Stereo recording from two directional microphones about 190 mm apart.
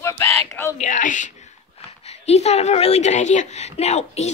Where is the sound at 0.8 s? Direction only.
40° left (ahead or behind).